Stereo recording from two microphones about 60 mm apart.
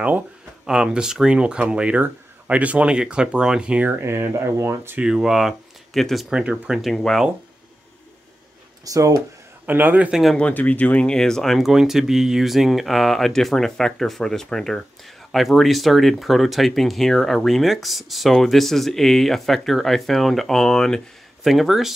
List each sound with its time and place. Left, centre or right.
0.7 s speech: centre
4.0 s speech: right
5.0 s speech: centre
8.8 s speech: right
9.7 s a man's voice: right
10.3 s speech: left
11.1 s speech: centre
11.6 s speech: centre
21.5 s speech: centre